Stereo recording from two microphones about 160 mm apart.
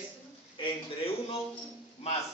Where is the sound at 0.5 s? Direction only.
30° left (ahead or behind).